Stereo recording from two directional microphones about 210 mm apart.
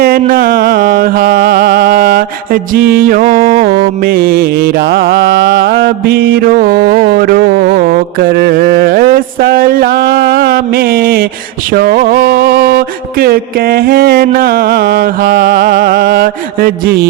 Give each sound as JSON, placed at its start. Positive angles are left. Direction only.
{"t": 0.0, "sound": "music", "side_deg": -45}